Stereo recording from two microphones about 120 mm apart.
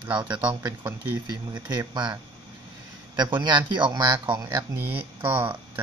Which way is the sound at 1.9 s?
40° right (ahead or behind).